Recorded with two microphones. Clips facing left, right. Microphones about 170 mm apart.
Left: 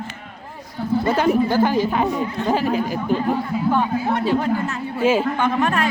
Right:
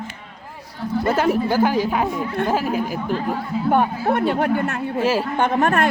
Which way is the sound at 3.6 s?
55° right (ahead or behind).